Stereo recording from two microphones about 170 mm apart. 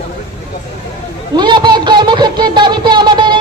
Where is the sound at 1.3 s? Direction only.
25° right (ahead or behind).